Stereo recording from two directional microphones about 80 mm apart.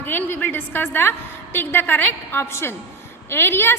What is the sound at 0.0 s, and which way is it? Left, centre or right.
A woman's voice, left.